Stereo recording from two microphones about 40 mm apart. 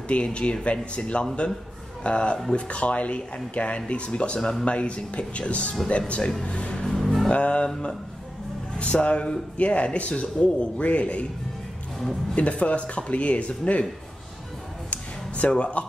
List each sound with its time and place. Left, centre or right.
0.1 s speech: left
6.9 s music: centre
7.2 s speech: left
8.7 s speech: left
12.4 s speech: left
14.9 s a sound: left
15.5 s speech: left